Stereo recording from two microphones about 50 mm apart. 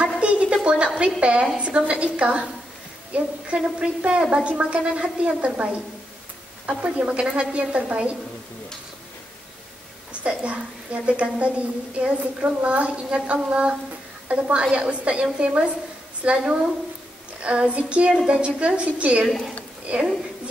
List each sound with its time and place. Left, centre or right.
0.2 s a sound: right
0.9 s a woman's voice: right
6.8 s a woman's voice: right
10.2 s a woman's voice: right
19.2 s a woman's voice: centre
19.9 s a woman's voice: right